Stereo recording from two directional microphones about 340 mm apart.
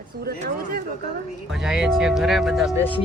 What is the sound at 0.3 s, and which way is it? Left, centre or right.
Speech, right.